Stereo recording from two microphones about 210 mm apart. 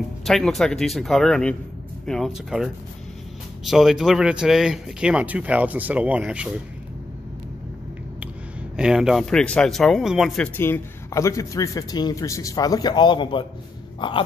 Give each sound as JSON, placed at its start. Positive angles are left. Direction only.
{"t": 0.2, "sound": "speech", "side_deg": 0}
{"t": 8.7, "sound": "a man's voice", "side_deg": -5}
{"t": 14.0, "sound": "a sound", "side_deg": 25}